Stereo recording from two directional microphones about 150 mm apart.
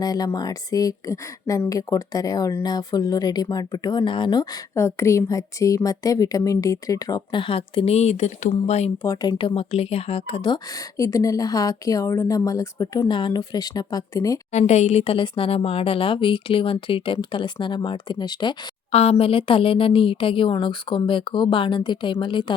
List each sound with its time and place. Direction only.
0.0 s a woman's voice: 25° left (ahead or behind); by 8.9 s 45° left (ahead or behind)
9.0 s a woman's voice: 30° left (ahead or behind)
9.6 s a woman's voice: 45° left (ahead or behind); by 14.3 s 25° left (ahead or behind)
14.7 s a woman's voice: 45° left (ahead or behind); by 18.5 s 30° left (ahead or behind)
18.9 s a woman's voice: 45° left (ahead or behind)